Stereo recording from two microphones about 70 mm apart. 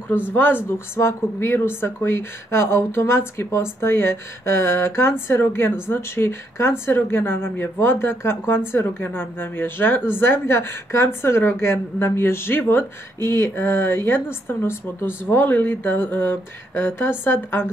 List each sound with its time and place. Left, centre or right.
0.3 s speech: left